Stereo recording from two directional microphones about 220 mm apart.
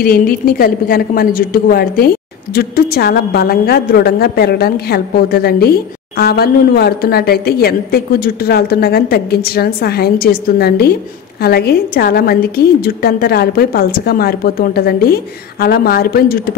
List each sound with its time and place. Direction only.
0.0 s a woman's voice: 40° left (ahead or behind)